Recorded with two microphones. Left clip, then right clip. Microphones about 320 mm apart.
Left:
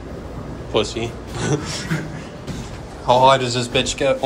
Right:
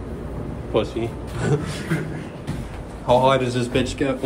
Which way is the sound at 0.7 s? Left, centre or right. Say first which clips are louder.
Left 2 dB; centre.